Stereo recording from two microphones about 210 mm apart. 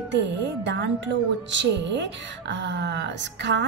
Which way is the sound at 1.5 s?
60° right (ahead or behind).